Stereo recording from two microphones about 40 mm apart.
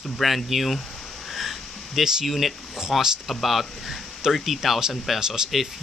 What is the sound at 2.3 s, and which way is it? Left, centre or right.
Speech, centre.